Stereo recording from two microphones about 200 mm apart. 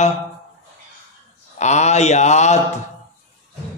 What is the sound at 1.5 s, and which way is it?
Speech, 35° left (ahead or behind).